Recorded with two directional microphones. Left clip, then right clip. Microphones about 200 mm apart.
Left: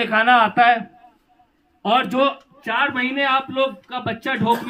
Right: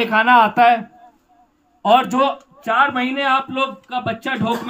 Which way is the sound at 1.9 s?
60° right (ahead or behind).